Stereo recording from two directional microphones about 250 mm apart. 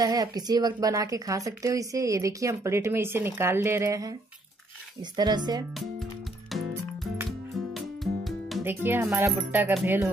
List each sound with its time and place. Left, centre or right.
0.0 s a woman's voice: centre
5.1 s a woman's voice: centre
7.7 s music: centre